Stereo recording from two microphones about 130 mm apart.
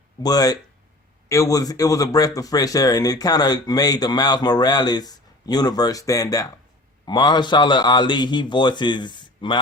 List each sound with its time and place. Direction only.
0.2 s a man's voice: 30° left (ahead or behind)